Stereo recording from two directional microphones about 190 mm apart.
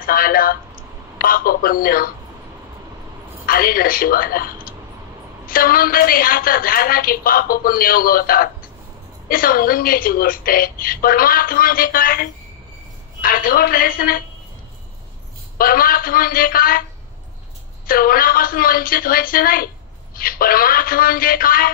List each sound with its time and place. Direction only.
0.0 s telephone: 50° left (ahead or behind)
1.1 s a woman's voice: 50° left (ahead or behind)
3.4 s a woman's voice: 50° left (ahead or behind)
15.5 s a woman's voice: 50° left (ahead or behind)
17.8 s a woman's voice: 50° left (ahead or behind)